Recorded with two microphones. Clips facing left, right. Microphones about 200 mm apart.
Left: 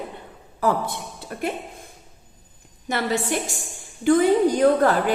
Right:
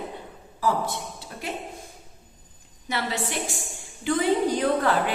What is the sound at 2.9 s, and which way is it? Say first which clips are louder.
A woman's voice: left 5 dB; 50° left (ahead or behind).